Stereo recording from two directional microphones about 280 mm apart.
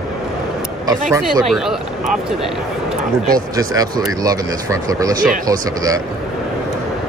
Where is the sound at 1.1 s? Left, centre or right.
Centre.